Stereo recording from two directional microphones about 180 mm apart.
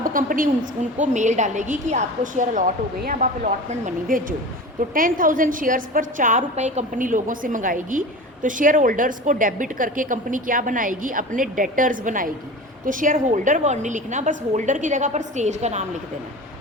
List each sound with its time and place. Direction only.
0.0 s a woman's voice: 50° right (ahead or behind)